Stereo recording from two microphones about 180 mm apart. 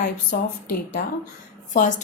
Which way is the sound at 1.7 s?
45° left (ahead or behind).